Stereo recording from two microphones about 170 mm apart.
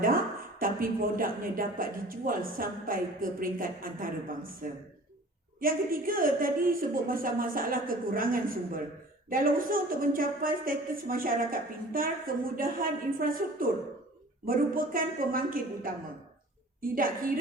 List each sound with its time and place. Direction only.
0.6 s a woman's voice: 55° right (ahead or behind)